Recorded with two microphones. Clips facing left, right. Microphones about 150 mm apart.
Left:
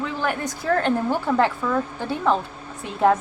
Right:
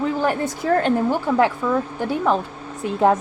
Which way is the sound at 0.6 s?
15° right (ahead or behind).